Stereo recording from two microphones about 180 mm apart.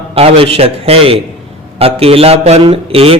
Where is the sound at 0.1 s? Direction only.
30° right (ahead or behind).